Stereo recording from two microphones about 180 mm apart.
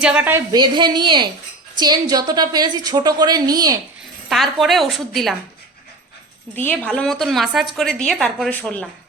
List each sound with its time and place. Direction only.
0.0 s a woman's voice: 5° right (ahead or behind)
0.5 s a woman's voice: 25° right (ahead or behind)
4.3 s a woman's voice: centre (ahead or behind)
6.6 s a woman's voice: 10° left (ahead or behind)